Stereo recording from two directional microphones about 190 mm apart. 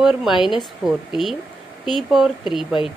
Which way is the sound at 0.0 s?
Centre (ahead or behind).